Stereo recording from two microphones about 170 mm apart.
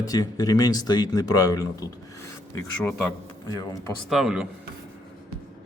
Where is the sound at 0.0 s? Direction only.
20° left (ahead or behind).